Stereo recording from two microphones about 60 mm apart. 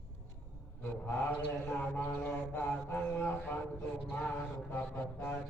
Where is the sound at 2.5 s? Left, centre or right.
Left.